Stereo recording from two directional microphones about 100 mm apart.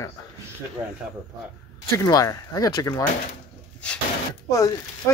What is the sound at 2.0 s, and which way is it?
Speech, 35° left (ahead or behind).